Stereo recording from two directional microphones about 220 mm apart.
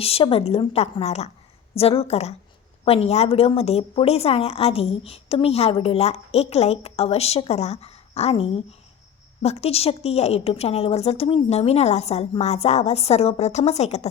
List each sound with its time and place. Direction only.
0.0 s a woman's voice: 25° left (ahead or behind)